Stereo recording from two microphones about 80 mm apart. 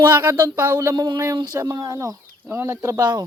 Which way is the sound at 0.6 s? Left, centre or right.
Right.